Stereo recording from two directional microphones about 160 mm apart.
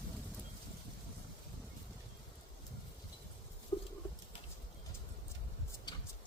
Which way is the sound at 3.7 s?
30° left (ahead or behind).